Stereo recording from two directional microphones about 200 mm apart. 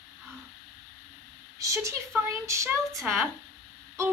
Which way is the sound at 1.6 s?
15° right (ahead or behind).